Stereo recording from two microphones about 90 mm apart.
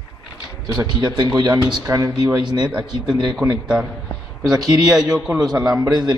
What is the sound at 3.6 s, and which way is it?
Speech, 10° right (ahead or behind).